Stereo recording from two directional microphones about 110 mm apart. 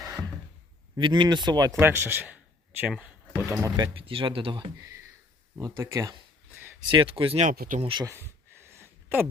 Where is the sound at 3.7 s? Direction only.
45° right (ahead or behind).